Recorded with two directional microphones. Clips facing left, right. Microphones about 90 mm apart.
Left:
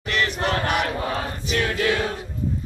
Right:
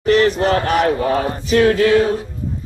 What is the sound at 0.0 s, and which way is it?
Speech, 40° right (ahead or behind).